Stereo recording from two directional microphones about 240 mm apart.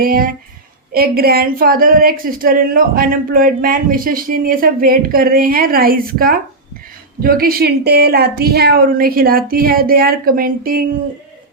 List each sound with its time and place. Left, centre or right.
0.0 s a woman's voice: right